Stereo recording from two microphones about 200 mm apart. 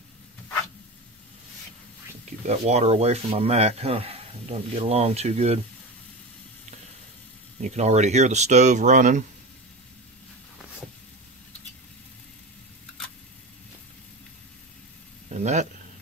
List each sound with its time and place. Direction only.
2.4 s speech: 35° right (ahead or behind)
7.6 s speech: 35° right (ahead or behind)
15.3 s a sound: 35° right (ahead or behind)